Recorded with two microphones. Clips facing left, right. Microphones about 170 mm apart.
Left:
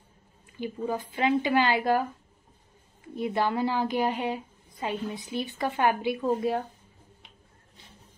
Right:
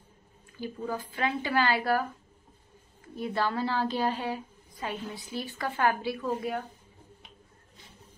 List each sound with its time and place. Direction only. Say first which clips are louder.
0.6 s speech: left 3 dB; 20° left (ahead or behind)